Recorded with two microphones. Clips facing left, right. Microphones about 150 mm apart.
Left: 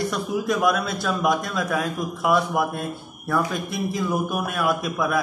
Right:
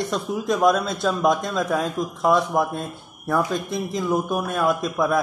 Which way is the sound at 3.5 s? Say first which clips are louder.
Right 1 dB; 5° left (ahead or behind).